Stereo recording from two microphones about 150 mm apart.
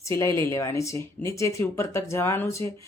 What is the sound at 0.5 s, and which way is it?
A woman's voice, 20° left (ahead or behind).